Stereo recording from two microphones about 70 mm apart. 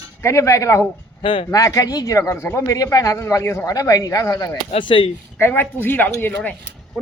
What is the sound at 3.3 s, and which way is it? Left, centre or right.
Speech, left.